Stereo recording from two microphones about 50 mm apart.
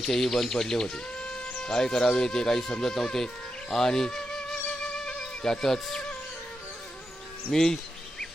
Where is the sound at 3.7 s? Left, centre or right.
Centre.